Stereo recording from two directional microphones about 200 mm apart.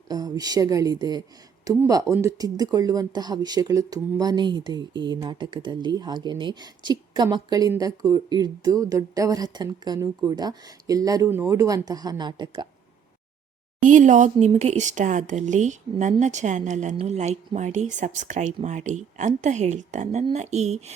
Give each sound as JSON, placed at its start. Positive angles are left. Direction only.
{"t": 0.1, "sound": "speech", "side_deg": -20}
{"t": 13.8, "sound": "speech", "side_deg": -40}